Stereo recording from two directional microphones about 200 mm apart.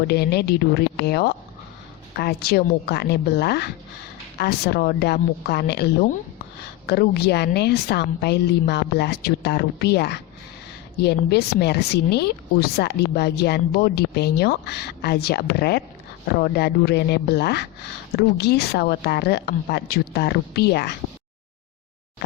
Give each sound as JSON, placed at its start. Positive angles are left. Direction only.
{"t": 0.1, "sound": "a woman's voice", "side_deg": 55}